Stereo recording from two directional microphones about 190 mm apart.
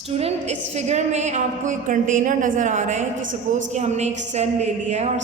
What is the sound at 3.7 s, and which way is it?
A man's voice, 35° right (ahead or behind).